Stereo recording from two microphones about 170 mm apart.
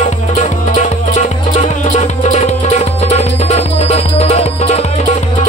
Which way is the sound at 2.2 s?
40° left (ahead or behind).